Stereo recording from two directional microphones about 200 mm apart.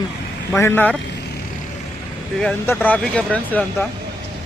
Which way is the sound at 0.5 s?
10° left (ahead or behind).